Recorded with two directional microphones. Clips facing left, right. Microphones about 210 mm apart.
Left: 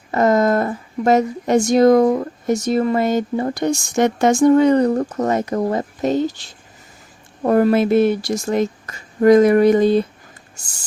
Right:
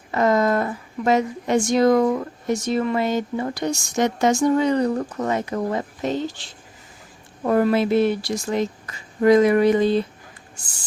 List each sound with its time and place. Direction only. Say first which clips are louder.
0.1 s a woman's voice: left 3 dB; 45° left (ahead or behind)
3.6 s speech: left 5 dB; 55° left (ahead or behind)